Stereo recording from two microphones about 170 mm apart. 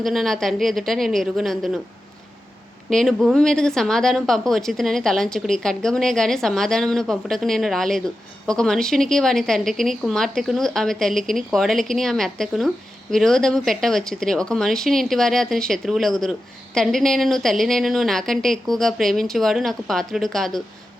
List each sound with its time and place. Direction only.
0.0 s a woman's voice: centre (ahead or behind)
2.9 s a woman's voice: centre (ahead or behind)